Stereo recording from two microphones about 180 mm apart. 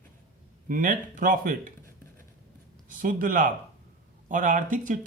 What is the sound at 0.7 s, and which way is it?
Speech, 50° right (ahead or behind).